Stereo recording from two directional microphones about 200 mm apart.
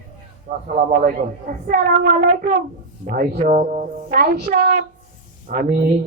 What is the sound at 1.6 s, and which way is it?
A child's voice, 45° right (ahead or behind).